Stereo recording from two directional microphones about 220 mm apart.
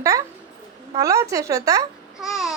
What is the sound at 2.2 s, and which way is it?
Babbling, centre (ahead or behind).